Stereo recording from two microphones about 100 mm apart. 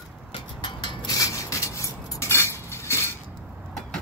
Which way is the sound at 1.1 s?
35° left (ahead or behind).